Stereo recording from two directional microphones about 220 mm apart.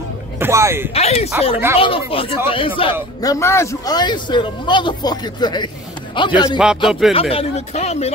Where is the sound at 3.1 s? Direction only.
15° left (ahead or behind).